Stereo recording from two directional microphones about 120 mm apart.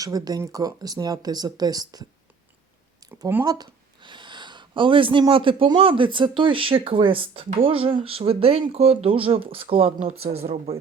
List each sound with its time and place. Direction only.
0.0 s speech: 30° right (ahead or behind)
3.0 s a sound: 30° right (ahead or behind)
5.3 s speech: 45° right (ahead or behind)
10.0 s speech: 60° right (ahead or behind)